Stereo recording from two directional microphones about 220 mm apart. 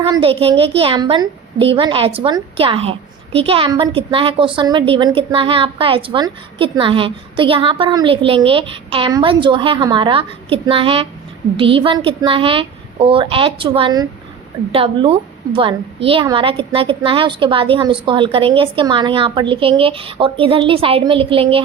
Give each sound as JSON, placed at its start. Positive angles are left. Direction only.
{"t": 0.0, "sound": "a woman's voice", "side_deg": -25}